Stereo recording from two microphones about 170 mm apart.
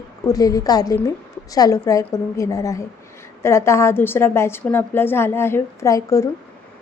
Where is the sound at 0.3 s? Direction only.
20° left (ahead or behind).